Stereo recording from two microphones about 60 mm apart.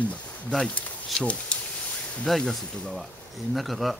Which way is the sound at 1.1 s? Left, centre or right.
Left.